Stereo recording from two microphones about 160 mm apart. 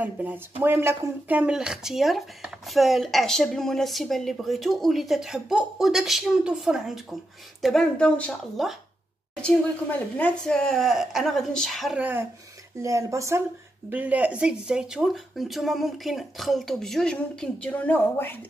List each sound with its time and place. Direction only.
0.0 s speech: 10° right (ahead or behind)
12.0 s speech: 10° right (ahead or behind); by 18.4 s 10° left (ahead or behind)